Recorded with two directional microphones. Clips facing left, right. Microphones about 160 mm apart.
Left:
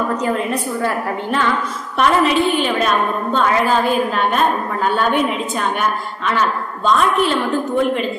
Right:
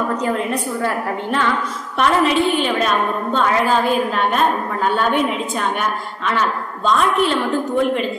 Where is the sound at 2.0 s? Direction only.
5° left (ahead or behind).